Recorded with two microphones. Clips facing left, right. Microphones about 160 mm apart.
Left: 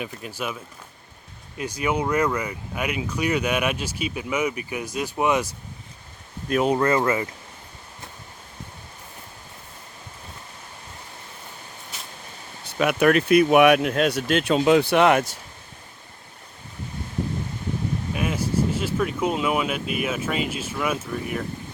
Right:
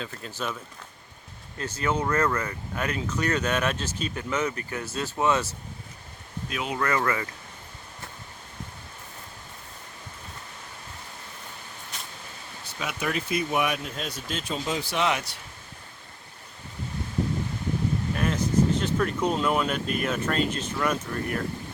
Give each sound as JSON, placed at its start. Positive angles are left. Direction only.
{"t": 0.0, "sound": "speech", "side_deg": 10}
{"t": 6.5, "sound": "speech", "side_deg": 45}
{"t": 6.7, "sound": "speech", "side_deg": 25}
{"t": 12.8, "sound": "speech", "side_deg": 65}
{"t": 18.1, "sound": "speech", "side_deg": 10}